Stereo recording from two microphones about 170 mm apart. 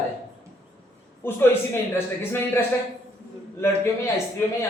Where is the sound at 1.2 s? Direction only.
15° left (ahead or behind).